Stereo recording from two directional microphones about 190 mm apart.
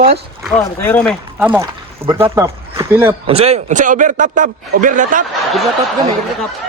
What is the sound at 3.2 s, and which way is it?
A man's voice, 30° right (ahead or behind).